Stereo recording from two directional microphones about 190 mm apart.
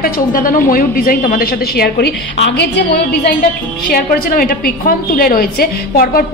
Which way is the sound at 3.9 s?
50° left (ahead or behind).